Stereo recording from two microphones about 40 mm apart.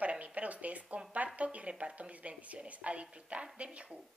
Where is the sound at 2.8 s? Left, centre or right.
Right.